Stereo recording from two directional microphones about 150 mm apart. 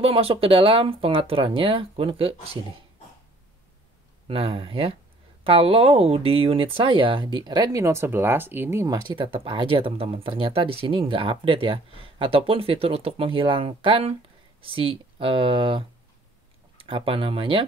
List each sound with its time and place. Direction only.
0.0 s speech: 40° right (ahead or behind)
4.3 s speech: 40° right (ahead or behind)